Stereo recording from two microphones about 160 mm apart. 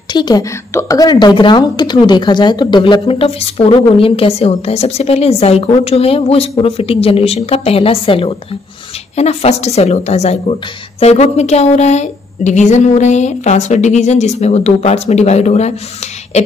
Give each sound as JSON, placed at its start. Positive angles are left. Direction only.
{"t": 0.1, "sound": "a woman's voice", "side_deg": 25}